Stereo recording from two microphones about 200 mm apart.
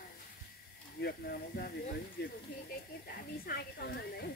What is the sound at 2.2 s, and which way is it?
Speech, 55° left (ahead or behind).